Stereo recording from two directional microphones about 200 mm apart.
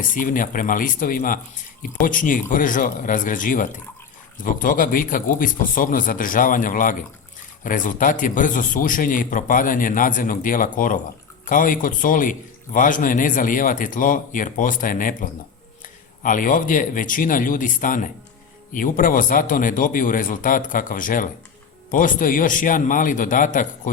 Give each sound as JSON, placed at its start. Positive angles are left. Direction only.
{"t": 0.1, "sound": "a man's voice", "side_deg": 40}